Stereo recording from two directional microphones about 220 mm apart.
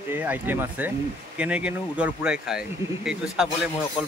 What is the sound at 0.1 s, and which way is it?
A man's voice, 10° right (ahead or behind).